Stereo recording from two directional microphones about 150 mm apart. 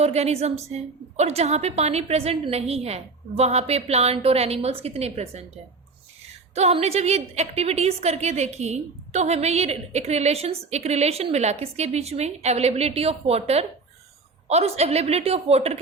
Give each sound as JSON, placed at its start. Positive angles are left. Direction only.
{"t": 0.0, "sound": "a woman's voice", "side_deg": -45}
{"t": 6.5, "sound": "a woman's voice", "side_deg": -45}